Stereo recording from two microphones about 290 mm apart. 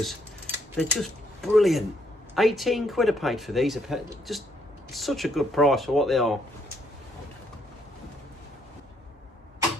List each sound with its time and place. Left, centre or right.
0.8 s speech: centre